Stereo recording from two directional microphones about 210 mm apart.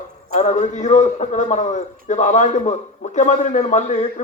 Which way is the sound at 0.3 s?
35° left (ahead or behind).